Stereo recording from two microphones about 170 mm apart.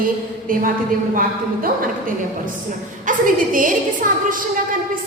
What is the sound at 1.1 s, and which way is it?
Speech, 55° right (ahead or behind).